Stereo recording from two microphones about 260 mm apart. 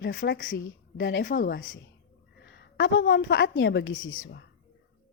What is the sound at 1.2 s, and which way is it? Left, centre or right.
Speech, left.